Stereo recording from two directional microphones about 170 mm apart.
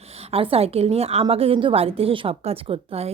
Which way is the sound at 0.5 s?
35° right (ahead or behind).